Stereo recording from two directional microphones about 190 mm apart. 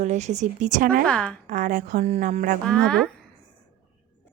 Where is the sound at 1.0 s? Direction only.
5° left (ahead or behind).